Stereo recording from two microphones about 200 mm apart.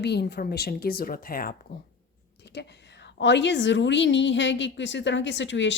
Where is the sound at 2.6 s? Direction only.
60° left (ahead or behind).